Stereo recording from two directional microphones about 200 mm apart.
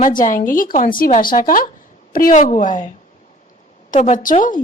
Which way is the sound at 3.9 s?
35° left (ahead or behind).